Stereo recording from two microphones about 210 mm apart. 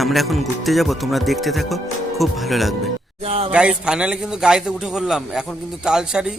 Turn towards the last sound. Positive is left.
turn(degrees=-5)  # may be behind; listen again after turning